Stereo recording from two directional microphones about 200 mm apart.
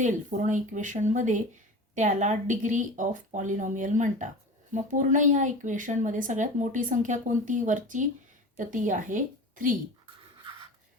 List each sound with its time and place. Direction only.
0.0 s a woman's voice: 40° right (ahead or behind)